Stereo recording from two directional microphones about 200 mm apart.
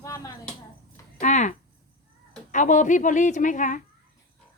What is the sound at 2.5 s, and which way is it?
A woman's voice, 40° left (ahead or behind).